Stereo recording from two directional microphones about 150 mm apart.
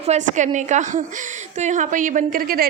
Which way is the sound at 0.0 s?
50° right (ahead or behind).